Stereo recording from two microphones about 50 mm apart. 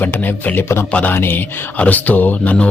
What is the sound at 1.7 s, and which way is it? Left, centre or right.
Speech, left.